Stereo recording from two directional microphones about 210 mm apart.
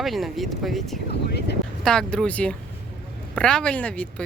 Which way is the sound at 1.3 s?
50° left (ahead or behind).